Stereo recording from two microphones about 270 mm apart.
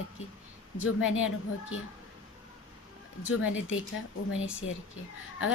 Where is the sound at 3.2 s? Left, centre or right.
Left.